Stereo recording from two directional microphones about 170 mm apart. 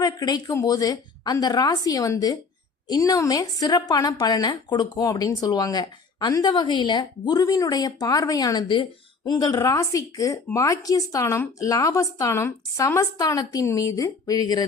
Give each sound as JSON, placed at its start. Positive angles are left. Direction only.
{"t": 0.0, "sound": "speech", "side_deg": 20}